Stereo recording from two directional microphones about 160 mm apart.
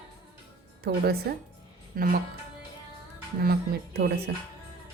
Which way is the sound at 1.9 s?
65° right (ahead or behind).